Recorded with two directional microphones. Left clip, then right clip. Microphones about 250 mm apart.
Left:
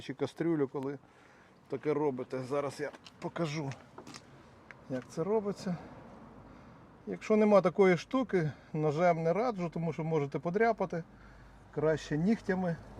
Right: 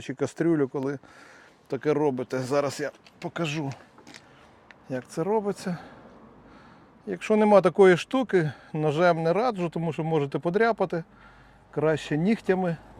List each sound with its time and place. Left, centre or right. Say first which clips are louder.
0.0 s speech: right 8 dB; right
3.2 s speech: right 6 dB; centre
4.9 s speech: right 6 dB; right
7.1 s speech: right 6 dB; right